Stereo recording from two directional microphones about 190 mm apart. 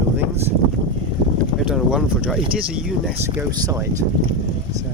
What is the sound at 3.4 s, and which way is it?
Speech, 15° right (ahead or behind).